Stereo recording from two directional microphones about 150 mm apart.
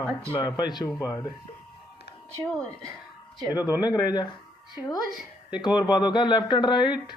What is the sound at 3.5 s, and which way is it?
Speech, 25° left (ahead or behind).